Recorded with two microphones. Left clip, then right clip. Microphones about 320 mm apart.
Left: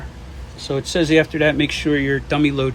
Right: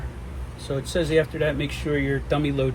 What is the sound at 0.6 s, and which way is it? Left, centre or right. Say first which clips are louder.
Speech: left 6 dB; left.